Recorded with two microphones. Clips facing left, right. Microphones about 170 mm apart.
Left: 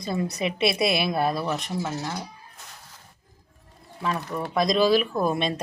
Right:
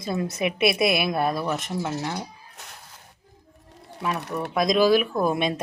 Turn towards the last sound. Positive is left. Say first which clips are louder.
# right 1 dB
turn(degrees=-5)  # may be behind; listen again after turning